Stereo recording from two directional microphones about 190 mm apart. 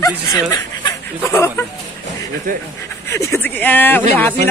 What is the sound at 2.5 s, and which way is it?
Speech, 45° right (ahead or behind).